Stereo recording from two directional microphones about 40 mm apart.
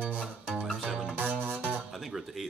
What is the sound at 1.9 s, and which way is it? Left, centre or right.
Speech, centre.